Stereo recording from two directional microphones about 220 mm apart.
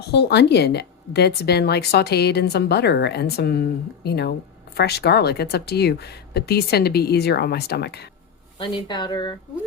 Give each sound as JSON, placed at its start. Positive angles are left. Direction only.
{"t": 0.1, "sound": "speech", "side_deg": 50}
{"t": 8.5, "sound": "speech", "side_deg": 20}